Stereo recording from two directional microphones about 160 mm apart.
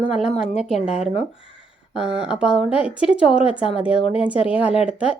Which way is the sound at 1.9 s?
5° right (ahead or behind).